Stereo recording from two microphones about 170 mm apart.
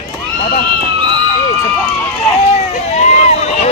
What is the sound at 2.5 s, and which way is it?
Run, 40° left (ahead or behind).